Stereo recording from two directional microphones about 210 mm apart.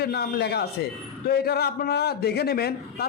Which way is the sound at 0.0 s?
50° left (ahead or behind).